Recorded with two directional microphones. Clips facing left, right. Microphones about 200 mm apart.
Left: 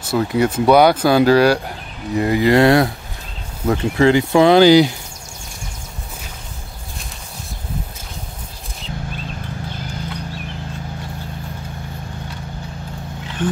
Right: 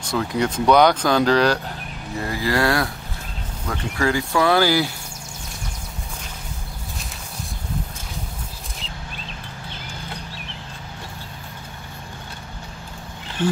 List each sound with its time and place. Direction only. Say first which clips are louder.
0.0 s speech: left 5 dB; 5° left (ahead or behind)
13.4 s speech: even; 10° left (ahead or behind)